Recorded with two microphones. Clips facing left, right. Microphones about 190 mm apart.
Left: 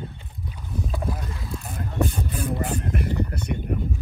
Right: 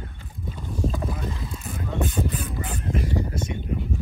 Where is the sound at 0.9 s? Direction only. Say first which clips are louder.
Right 1 dB; 5° left (ahead or behind).